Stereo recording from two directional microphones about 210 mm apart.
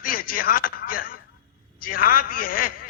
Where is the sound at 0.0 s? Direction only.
45° left (ahead or behind).